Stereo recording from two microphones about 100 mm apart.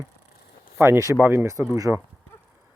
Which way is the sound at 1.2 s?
20° right (ahead or behind).